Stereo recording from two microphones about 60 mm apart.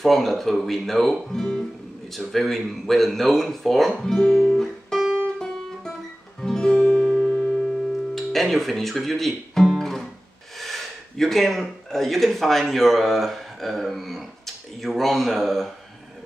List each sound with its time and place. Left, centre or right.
0.0 s speech: centre
6.4 s music: centre
8.1 s guitar: centre
10.6 s speech: centre